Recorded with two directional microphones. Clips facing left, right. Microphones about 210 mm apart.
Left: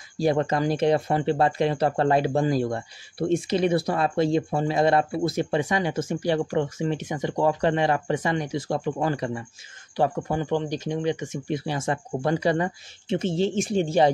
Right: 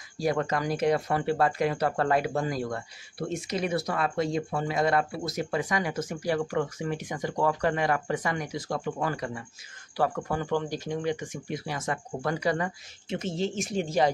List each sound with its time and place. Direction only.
0.2 s speech: 25° left (ahead or behind)